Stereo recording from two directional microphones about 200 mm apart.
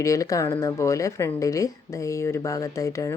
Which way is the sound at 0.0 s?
15° left (ahead or behind).